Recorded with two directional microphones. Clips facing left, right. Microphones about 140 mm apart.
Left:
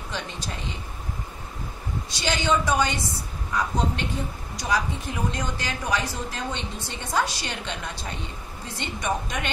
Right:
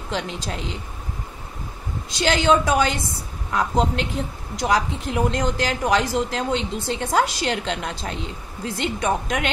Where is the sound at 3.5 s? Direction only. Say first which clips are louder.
Right 5 dB; 90° right.